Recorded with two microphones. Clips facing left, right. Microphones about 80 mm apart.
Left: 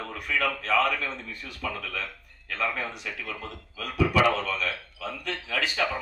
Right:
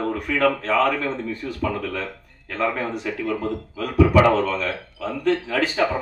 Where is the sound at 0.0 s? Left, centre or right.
Right.